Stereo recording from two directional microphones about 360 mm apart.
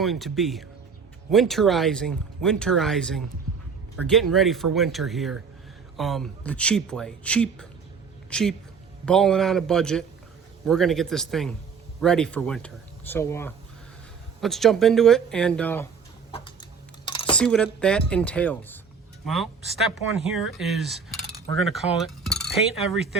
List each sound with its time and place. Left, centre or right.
0.0 s speech: centre
16.3 s chicken: centre
17.1 s a sound: centre
17.3 s a man's voice: centre